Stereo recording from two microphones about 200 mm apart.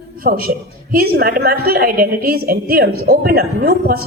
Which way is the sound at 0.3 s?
45° right (ahead or behind).